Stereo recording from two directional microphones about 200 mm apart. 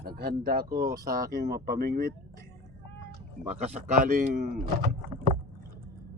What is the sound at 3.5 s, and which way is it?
A man's voice, 35° right (ahead or behind).